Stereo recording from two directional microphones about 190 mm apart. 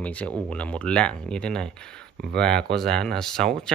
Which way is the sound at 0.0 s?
5° left (ahead or behind).